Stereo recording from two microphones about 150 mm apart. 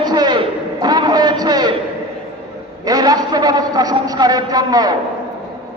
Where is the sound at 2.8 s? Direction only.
25° right (ahead or behind).